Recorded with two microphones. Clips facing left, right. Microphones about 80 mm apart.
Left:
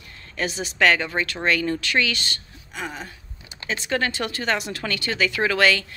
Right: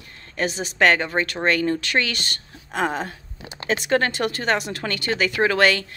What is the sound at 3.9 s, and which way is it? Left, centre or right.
Speech, right.